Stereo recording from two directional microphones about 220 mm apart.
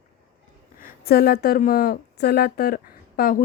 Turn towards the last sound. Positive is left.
turn(degrees=40)  # may be behind; listen again after turning